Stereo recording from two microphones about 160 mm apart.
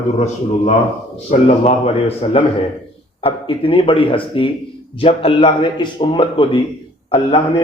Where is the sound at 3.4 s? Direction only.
35° left (ahead or behind).